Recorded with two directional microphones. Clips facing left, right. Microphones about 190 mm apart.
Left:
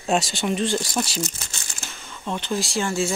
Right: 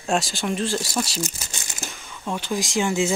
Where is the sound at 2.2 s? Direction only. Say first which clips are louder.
Even; 10° right (ahead or behind).